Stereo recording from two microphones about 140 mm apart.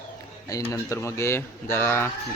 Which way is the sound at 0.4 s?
25° left (ahead or behind).